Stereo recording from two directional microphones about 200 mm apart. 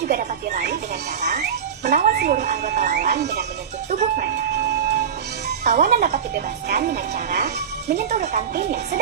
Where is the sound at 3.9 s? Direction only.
40° right (ahead or behind).